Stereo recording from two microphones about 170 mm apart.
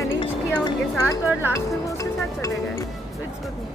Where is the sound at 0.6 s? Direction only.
20° left (ahead or behind).